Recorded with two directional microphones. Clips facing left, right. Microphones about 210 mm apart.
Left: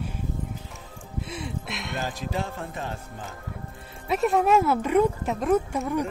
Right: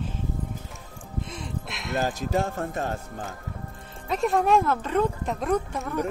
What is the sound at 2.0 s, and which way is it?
Speech, 45° right (ahead or behind).